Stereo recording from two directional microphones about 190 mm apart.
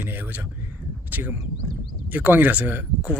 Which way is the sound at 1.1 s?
10° right (ahead or behind).